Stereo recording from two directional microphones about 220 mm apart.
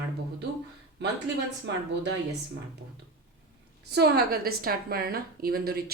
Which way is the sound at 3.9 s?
45° right (ahead or behind).